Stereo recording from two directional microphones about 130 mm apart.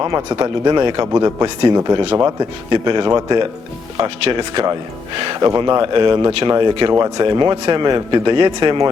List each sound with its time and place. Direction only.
0.3 s speech: 35° right (ahead or behind)